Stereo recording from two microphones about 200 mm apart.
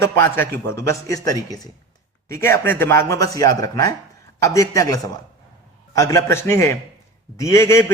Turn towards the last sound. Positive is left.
turn(degrees=15)  # may be behind; listen again after turning